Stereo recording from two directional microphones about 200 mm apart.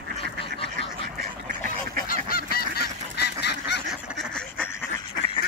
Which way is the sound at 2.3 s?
50° left (ahead or behind).